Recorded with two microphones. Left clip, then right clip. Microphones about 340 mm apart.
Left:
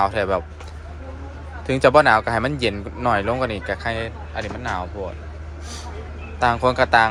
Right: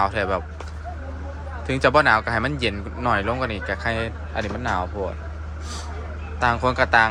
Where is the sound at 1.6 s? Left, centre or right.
Centre.